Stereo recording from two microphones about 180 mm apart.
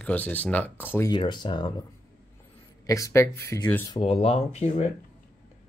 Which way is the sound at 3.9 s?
30° left (ahead or behind).